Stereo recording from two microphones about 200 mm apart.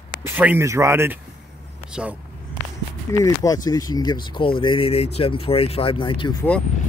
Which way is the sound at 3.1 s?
15° left (ahead or behind).